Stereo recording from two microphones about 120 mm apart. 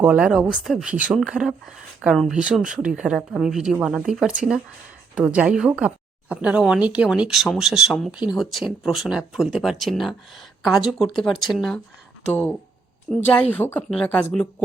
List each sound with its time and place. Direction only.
0.0 s speech: 10° right (ahead or behind)
12.3 s speech: 15° left (ahead or behind)